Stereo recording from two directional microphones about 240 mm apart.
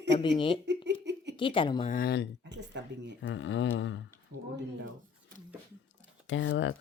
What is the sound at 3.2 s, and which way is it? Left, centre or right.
Speech, left.